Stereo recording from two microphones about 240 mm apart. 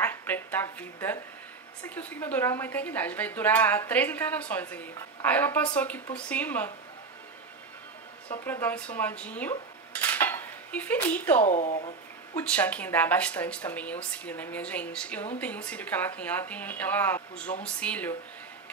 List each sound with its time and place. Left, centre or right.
0.0 s a woman's voice: centre
8.5 s speech: centre
11.4 s speech: left
12.4 s a woman's voice: centre